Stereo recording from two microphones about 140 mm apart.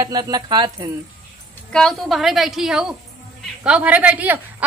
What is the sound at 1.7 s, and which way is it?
A woman's voice, 5° left (ahead or behind).